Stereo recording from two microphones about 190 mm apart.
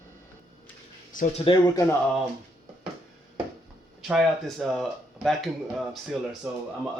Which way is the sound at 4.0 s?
Centre (ahead or behind).